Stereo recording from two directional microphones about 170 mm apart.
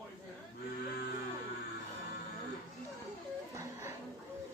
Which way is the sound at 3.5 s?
15° right (ahead or behind).